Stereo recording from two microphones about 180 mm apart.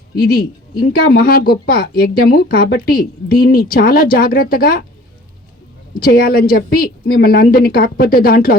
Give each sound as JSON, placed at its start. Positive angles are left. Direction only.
{"t": 0.2, "sound": "speech", "side_deg": 55}
{"t": 5.9, "sound": "speech", "side_deg": 55}